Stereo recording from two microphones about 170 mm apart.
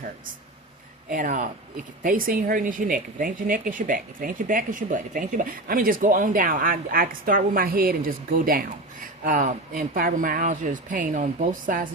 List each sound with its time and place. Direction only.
1.1 s speech: 50° right (ahead or behind)